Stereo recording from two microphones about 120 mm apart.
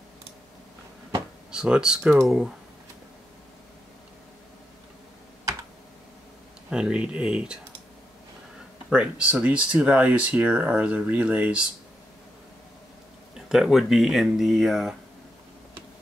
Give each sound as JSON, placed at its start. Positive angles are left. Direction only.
{"t": 1.5, "sound": "speech", "side_deg": -5}
{"t": 6.7, "sound": "speech", "side_deg": -5}
{"t": 8.9, "sound": "speech", "side_deg": -10}
{"t": 13.5, "sound": "speech", "side_deg": 0}